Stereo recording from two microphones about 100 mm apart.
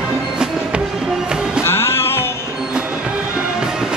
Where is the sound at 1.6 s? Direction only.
25° left (ahead or behind).